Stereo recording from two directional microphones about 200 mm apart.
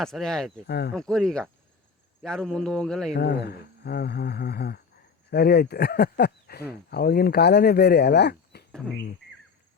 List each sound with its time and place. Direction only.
0.0 s a man's voice: centre (ahead or behind)
0.7 s speech: 55° left (ahead or behind)
0.9 s a man's voice: 5° left (ahead or behind)
3.2 s speech: 55° left (ahead or behind)